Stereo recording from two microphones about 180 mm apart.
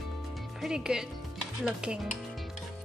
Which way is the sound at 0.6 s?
5° right (ahead or behind).